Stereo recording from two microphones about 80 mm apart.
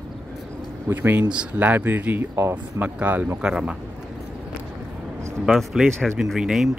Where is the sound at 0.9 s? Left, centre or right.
Right.